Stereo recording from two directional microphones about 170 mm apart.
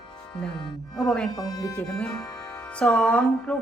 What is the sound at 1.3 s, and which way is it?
Speech, 20° left (ahead or behind).